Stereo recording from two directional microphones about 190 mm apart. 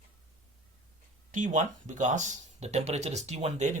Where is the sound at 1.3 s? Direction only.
40° right (ahead or behind).